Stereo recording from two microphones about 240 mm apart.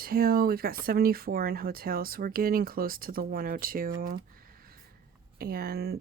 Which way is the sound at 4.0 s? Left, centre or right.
Right.